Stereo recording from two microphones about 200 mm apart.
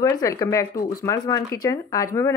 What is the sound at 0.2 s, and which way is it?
Speech, 15° left (ahead or behind).